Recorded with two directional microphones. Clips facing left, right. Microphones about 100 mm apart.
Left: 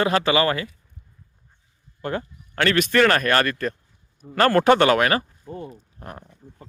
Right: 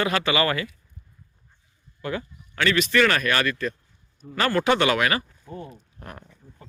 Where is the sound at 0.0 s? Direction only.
30° left (ahead or behind).